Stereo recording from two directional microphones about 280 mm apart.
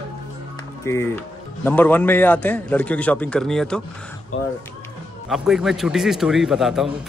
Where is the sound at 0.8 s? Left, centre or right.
Centre.